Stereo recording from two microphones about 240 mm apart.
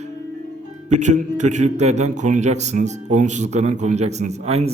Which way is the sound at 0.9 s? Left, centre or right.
Right.